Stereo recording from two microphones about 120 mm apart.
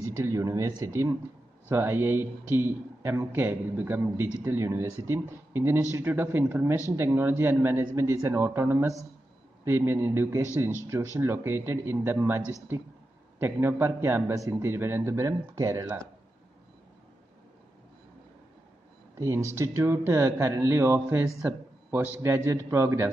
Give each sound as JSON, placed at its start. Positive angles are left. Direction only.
{"t": 0.2, "sound": "a man's voice", "side_deg": -30}
{"t": 13.4, "sound": "a man's voice", "side_deg": -20}
{"t": 19.1, "sound": "a man's voice", "side_deg": -25}